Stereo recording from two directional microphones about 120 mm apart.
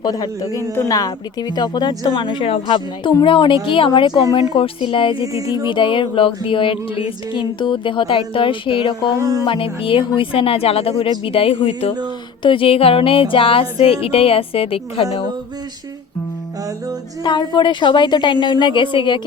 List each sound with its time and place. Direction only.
0.0 s speech: 35° left (ahead or behind)
2.6 s music: 40° left (ahead or behind)
5.2 s music: 30° right (ahead or behind)
5.6 s music: 45° left (ahead or behind)
9.1 s music: 30° right (ahead or behind)
9.5 s music: 50° left (ahead or behind)
17.2 s speech: 40° left (ahead or behind)